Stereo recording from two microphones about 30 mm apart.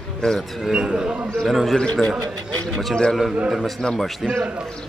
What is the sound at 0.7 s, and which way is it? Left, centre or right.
Speech, right.